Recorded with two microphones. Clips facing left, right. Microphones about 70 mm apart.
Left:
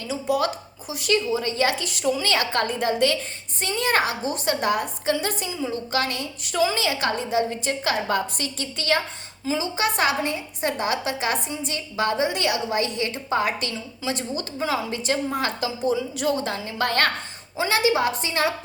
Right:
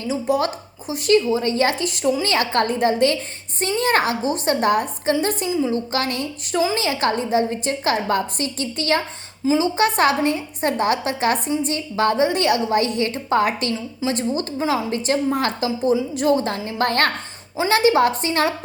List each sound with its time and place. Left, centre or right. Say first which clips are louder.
0.1 s a woman's voice: right 3 dB; right
2.3 s a woman's voice: right 4 dB; right
4.2 s speech: right 5 dB; right
4.6 s a woman's voice: right 4 dB; right